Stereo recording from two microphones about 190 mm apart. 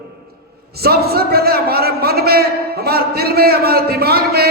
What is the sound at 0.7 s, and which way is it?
A man's voice, 55° right (ahead or behind).